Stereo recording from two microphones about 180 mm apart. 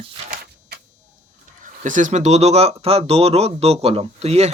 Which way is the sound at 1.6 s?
45° right (ahead or behind).